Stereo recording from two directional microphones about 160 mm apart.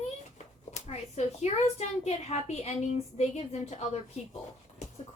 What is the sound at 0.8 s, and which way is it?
A woman's voice, 45° left (ahead or behind).